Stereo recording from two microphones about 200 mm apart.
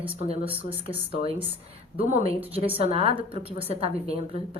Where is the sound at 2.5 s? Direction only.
30° right (ahead or behind).